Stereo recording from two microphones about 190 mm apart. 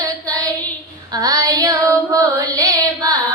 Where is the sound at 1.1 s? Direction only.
20° right (ahead or behind).